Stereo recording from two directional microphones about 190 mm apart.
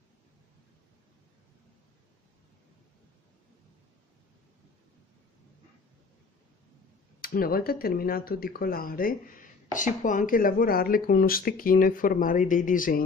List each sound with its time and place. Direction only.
7.2 s speech: 50° left (ahead or behind)